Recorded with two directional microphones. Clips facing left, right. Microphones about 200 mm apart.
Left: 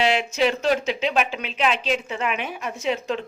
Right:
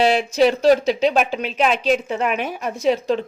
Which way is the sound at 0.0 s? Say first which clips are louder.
Right 5 dB; 35° right (ahead or behind).